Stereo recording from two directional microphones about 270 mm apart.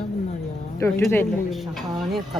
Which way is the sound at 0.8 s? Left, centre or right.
Centre.